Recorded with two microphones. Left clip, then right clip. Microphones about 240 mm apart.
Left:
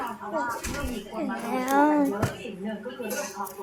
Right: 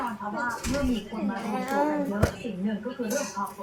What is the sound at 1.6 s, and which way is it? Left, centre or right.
Speech, left.